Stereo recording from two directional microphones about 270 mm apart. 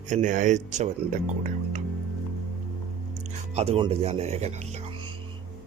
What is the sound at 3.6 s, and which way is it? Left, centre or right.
Speech, right.